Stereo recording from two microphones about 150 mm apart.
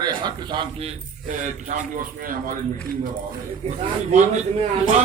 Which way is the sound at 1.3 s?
60° right (ahead or behind).